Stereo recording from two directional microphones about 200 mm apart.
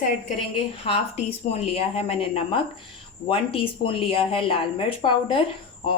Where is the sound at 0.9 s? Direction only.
30° left (ahead or behind).